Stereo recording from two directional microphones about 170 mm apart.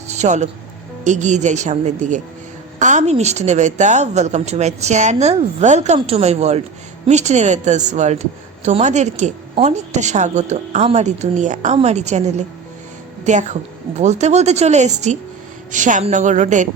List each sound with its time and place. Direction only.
0.1 s music: 45° right (ahead or behind)
1.0 s a woman's voice: 45° right (ahead or behind)